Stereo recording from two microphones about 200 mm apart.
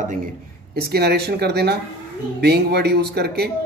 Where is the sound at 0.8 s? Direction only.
50° right (ahead or behind).